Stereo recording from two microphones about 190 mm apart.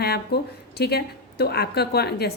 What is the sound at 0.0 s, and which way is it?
A woman's voice, 60° left (ahead or behind).